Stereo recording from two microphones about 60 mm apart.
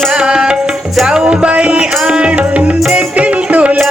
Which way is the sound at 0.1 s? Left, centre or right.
Centre.